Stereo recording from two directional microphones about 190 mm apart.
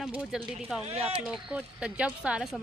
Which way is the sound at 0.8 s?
30° right (ahead or behind).